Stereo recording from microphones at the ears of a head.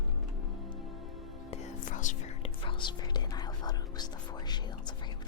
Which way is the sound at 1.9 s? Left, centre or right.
Left.